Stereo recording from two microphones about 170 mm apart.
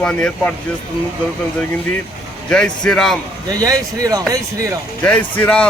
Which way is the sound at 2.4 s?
5° left (ahead or behind).